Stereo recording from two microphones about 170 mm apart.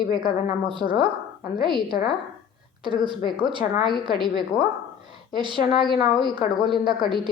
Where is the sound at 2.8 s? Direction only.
30° right (ahead or behind).